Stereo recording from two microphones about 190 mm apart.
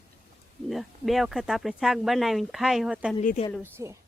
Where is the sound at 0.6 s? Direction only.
Centre (ahead or behind).